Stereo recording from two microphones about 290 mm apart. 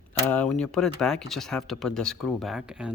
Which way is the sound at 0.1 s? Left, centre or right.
Centre.